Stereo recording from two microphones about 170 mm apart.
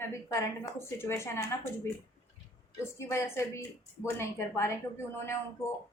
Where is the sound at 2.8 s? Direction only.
15° left (ahead or behind).